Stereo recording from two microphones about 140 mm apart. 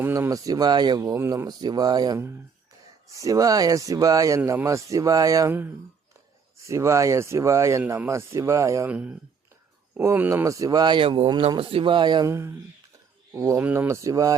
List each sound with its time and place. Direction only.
0.0 s speech: 20° right (ahead or behind)
6.7 s speech: 20° right (ahead or behind)
8.9 s speech: 10° right (ahead or behind)
10.0 s speech: 20° right (ahead or behind)
12.3 s speech: 20° right (ahead or behind)